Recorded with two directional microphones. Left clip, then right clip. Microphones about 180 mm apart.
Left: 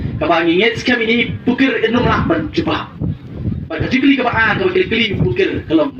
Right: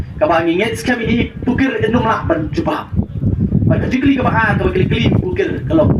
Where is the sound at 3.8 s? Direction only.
45° right (ahead or behind).